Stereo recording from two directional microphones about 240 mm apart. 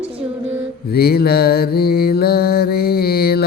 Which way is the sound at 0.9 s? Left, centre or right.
Left.